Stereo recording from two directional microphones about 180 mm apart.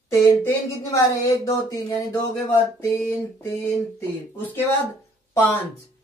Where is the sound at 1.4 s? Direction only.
20° left (ahead or behind).